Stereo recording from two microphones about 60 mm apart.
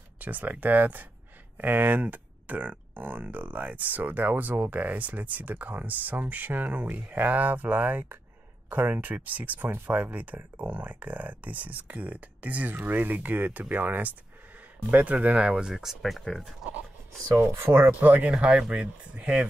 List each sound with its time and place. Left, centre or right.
0.2 s speech: right; by 16.0 s centre
16.0 s speech: centre
17.4 s speech: right
18.0 s speech: right
18.3 s speech: centre